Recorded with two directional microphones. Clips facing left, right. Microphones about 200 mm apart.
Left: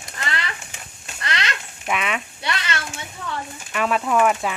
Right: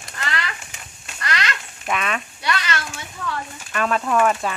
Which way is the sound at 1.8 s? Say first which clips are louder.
Even; 10° left (ahead or behind).